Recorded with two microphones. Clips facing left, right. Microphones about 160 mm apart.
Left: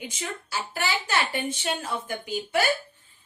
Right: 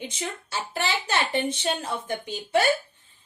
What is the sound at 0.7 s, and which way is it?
A woman's voice, 25° right (ahead or behind).